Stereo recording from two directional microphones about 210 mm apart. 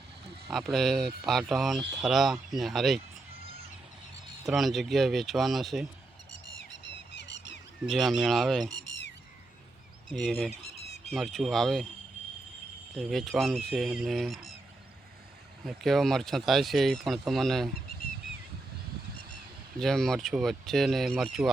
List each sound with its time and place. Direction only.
0.4 s speech: centre (ahead or behind)
4.4 s speech: centre (ahead or behind)
6.7 s squawk: 55° left (ahead or behind)
7.9 s speech: centre (ahead or behind)
10.1 s speech: centre (ahead or behind)
13.0 s speech: centre (ahead or behind)
15.6 s speech: centre (ahead or behind)
19.8 s speech: centre (ahead or behind)